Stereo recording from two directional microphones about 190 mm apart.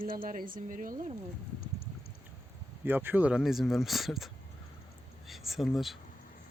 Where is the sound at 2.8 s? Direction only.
10° right (ahead or behind).